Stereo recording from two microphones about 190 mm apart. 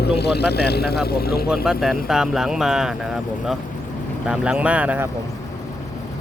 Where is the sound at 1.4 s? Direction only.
5° right (ahead or behind).